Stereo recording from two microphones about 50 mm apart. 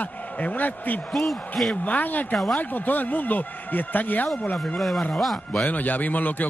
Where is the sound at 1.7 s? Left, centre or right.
Left.